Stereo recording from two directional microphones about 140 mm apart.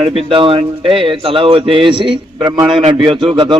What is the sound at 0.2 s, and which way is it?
A man's voice, 40° right (ahead or behind).